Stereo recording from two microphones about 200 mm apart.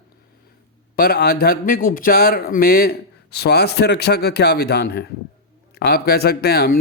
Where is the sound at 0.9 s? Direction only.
50° left (ahead or behind).